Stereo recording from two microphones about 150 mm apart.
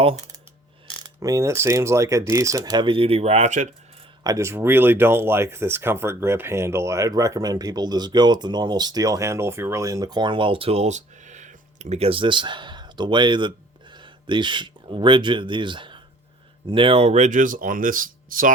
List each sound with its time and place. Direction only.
1.2 s speech: 20° right (ahead or behind); by 3.7 s 50° right (ahead or behind)
4.2 s speech: 20° right (ahead or behind); by 18.5 s 65° right (ahead or behind)